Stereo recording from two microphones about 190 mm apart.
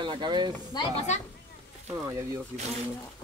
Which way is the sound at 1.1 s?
40° left (ahead or behind).